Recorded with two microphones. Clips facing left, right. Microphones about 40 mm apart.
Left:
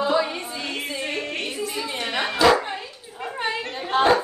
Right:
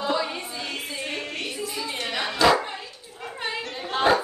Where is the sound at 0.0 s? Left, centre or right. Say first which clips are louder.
Left 4 dB; centre.